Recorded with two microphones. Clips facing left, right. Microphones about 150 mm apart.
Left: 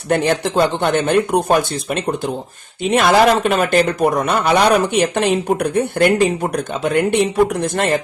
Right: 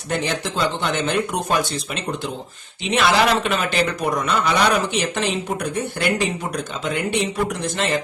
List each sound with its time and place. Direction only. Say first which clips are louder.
0.1 s speech: left 8 dB; 55° left (ahead or behind)
2.8 s speech: left 5 dB; 50° left (ahead or behind)